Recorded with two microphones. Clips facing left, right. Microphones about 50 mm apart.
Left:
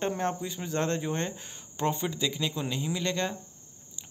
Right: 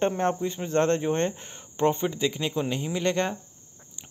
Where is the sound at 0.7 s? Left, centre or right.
Right.